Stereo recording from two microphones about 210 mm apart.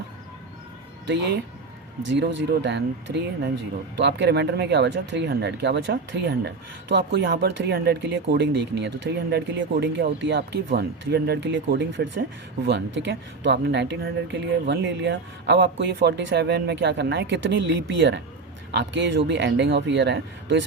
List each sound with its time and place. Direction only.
1.0 s speech: 55° right (ahead or behind)